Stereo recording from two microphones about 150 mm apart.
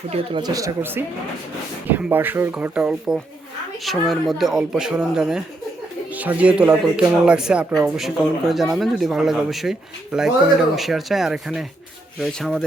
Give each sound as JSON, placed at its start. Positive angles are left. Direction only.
{"t": 0.1, "sound": "speech", "side_deg": -35}